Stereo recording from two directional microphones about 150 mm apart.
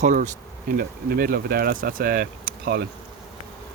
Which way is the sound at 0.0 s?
60° right (ahead or behind).